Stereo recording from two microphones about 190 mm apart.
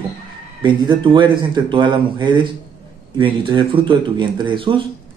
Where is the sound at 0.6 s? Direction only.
25° right (ahead or behind).